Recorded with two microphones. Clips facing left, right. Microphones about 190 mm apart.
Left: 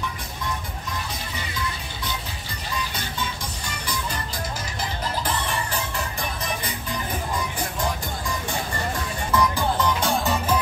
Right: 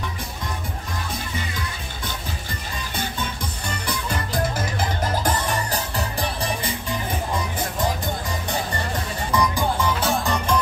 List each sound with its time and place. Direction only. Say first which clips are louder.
4.6 s music: right 5 dB; 50° right (ahead or behind)
9.3 s music: even; 15° right (ahead or behind); by 10.6 s 5° left (ahead or behind)